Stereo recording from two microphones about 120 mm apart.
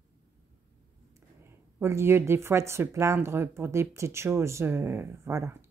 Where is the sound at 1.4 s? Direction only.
20° right (ahead or behind).